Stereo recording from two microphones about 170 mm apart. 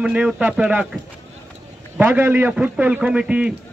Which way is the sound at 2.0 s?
10° right (ahead or behind).